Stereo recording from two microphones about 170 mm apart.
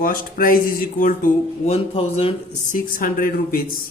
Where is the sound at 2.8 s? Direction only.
55° left (ahead or behind).